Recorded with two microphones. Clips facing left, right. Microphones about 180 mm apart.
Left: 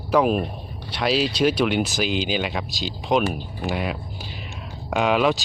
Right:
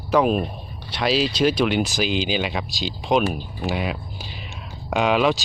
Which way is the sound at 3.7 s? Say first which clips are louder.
Even; centre (ahead or behind).